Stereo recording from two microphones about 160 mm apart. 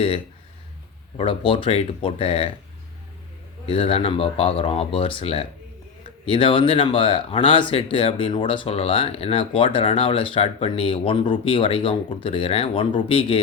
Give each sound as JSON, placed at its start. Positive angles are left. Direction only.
{"t": 1.1, "sound": "speech", "side_deg": 35}
{"t": 3.7, "sound": "speech", "side_deg": 35}